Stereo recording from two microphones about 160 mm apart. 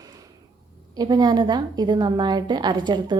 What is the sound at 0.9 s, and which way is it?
A woman's voice, 25° right (ahead or behind).